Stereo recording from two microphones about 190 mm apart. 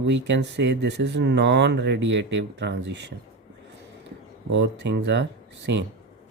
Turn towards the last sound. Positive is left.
turn(degrees=-65)  # may be behind; listen again after turning